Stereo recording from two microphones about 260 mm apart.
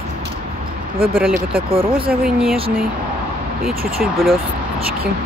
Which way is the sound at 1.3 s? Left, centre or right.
Right.